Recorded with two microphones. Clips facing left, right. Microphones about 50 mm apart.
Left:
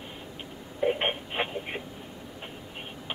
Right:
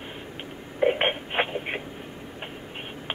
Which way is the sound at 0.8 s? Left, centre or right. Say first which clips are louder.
Right 4 dB; right.